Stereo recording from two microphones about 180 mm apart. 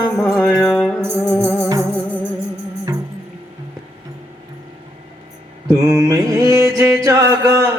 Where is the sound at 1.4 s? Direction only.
5° left (ahead or behind).